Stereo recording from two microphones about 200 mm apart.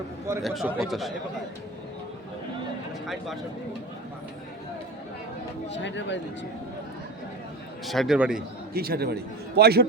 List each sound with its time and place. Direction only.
0.4 s a man's voice: centre (ahead or behind)
5.6 s speech: 60° left (ahead or behind)
7.9 s a man's voice: centre (ahead or behind)
8.7 s a man's voice: 50° right (ahead or behind)